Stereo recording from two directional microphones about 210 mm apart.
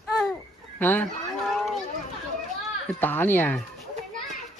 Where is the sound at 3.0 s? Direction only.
10° left (ahead or behind).